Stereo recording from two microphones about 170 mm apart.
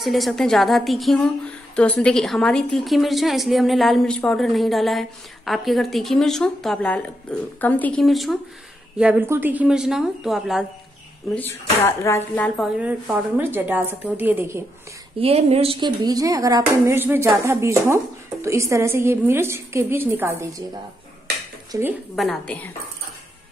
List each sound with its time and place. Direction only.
0.0 s a woman's voice: centre (ahead or behind)
11.3 s speech: 15° left (ahead or behind)
12.7 s a woman's voice: 5° right (ahead or behind)
15.1 s a woman's voice: 35° right (ahead or behind); by 20.6 s 15° right (ahead or behind)
21.7 s a woman's voice: 20° right (ahead or behind)
22.1 s a woman's voice: centre (ahead or behind)